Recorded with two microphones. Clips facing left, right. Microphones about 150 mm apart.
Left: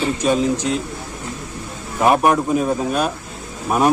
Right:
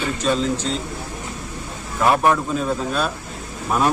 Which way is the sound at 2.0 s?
20° left (ahead or behind).